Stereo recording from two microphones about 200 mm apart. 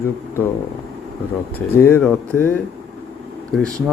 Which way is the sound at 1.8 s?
10° left (ahead or behind).